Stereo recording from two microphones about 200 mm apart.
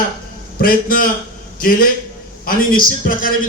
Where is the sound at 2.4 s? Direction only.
45° left (ahead or behind).